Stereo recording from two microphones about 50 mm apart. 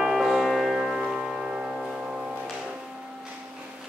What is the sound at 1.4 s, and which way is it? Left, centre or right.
Music, right.